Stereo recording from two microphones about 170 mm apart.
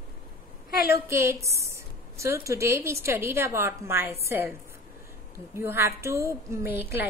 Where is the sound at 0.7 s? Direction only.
70° left (ahead or behind).